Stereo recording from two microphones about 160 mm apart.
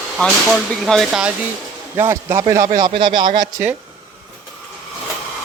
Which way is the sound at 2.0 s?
15° right (ahead or behind).